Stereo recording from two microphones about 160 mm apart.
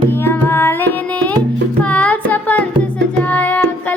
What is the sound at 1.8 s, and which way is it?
Music, 10° left (ahead or behind).